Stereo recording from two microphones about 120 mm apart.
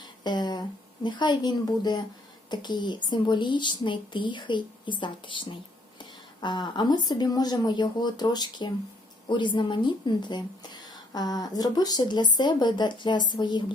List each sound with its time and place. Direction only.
0.3 s a woman's voice: 35° left (ahead or behind)